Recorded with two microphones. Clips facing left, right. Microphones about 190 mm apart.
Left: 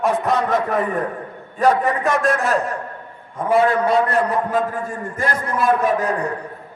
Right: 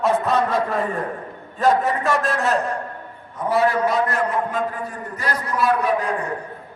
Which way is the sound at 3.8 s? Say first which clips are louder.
Left 3 dB; 30° left (ahead or behind).